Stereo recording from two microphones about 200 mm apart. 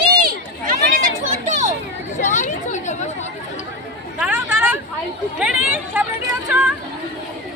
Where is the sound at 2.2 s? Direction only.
40° left (ahead or behind).